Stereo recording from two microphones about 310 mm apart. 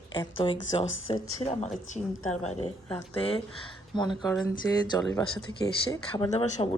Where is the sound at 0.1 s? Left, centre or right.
Centre.